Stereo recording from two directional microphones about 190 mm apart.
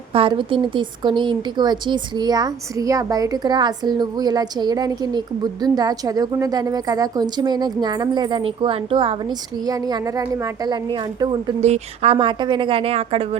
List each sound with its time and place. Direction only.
0.1 s speech: 30° right (ahead or behind)
11.6 s speech: 35° right (ahead or behind)